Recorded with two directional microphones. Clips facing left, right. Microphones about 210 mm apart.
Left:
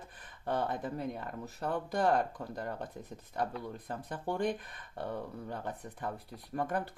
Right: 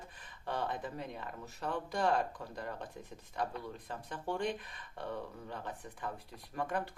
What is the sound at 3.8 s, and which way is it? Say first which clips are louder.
Speech: left 3 dB; 45° left (ahead or behind).